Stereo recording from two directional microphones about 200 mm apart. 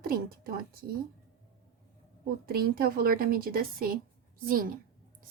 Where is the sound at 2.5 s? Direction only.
50° right (ahead or behind).